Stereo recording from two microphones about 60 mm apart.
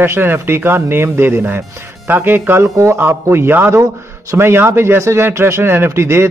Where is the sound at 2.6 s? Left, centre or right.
Right.